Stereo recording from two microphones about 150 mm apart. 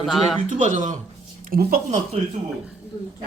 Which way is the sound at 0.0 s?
Centre (ahead or behind).